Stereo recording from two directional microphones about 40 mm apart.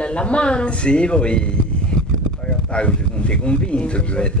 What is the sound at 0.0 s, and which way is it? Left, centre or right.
Speech, left.